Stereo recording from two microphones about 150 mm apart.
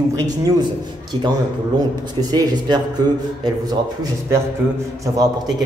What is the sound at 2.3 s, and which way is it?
Speech, 30° right (ahead or behind).